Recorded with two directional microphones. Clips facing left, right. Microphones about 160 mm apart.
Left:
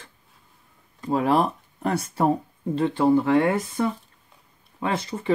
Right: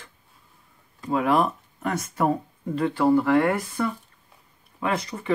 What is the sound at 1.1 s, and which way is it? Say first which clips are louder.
Speech: left 1 dB; 35° left (ahead or behind).